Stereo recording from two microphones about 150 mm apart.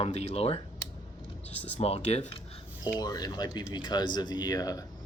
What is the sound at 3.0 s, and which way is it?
Speech, 25° left (ahead or behind).